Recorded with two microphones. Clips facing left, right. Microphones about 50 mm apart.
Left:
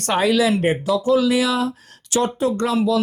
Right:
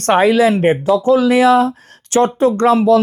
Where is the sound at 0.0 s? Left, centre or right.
Right.